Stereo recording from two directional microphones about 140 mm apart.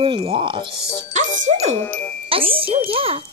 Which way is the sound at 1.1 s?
55° right (ahead or behind).